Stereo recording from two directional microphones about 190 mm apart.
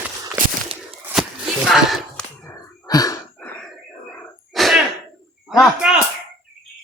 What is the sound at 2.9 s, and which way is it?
Gasp, 20° left (ahead or behind).